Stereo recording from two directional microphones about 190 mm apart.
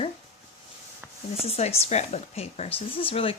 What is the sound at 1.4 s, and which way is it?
Speech, 35° left (ahead or behind).